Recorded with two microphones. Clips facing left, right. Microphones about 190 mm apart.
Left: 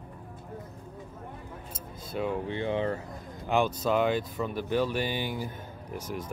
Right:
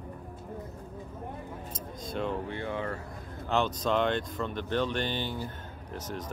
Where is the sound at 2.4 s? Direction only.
20° left (ahead or behind).